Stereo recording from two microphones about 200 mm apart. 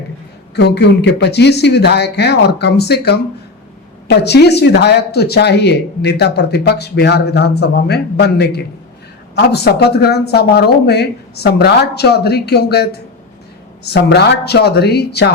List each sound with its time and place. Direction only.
0.5 s speech: 55° left (ahead or behind)